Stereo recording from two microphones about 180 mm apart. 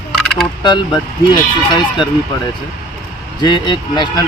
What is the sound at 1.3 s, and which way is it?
Speech, 25° left (ahead or behind).